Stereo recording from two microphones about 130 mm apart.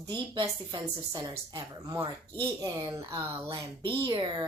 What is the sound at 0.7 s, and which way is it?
A woman's voice, 35° right (ahead or behind).